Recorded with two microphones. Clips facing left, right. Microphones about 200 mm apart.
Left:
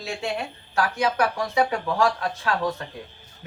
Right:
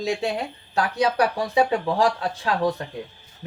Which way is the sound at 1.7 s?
30° right (ahead or behind).